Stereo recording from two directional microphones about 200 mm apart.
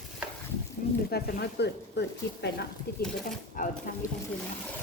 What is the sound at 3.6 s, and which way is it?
Speech, 40° left (ahead or behind).